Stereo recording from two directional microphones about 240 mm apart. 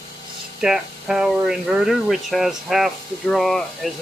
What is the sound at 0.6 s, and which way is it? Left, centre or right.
Speech, centre.